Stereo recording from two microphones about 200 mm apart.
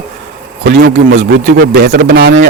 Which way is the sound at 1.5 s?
55° right (ahead or behind).